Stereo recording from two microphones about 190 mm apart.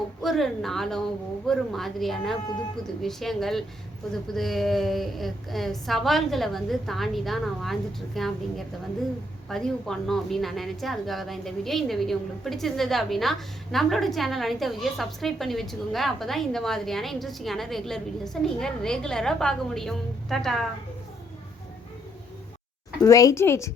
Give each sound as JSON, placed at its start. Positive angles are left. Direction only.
{"t": 0.2, "sound": "a woman's voice", "side_deg": 0}
{"t": 23.0, "sound": "speech", "side_deg": 15}